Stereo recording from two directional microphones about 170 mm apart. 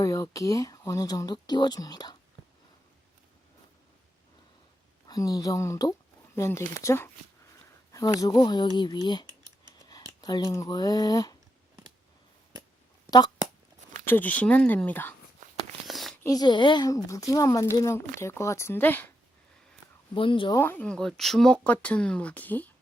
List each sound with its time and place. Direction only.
0.0 s speech: 20° left (ahead or behind)
5.0 s speech: 20° left (ahead or behind)
8.1 s speech: 25° left (ahead or behind)
13.1 s speech: 25° left (ahead or behind)
14.0 s speech: 10° left (ahead or behind)
15.4 s a sound: 50° right (ahead or behind)
15.9 s a sound: centre (ahead or behind)
16.2 s speech: 20° left (ahead or behind)
20.1 s speech: 30° left (ahead or behind)
20.6 s speech: 10° left (ahead or behind)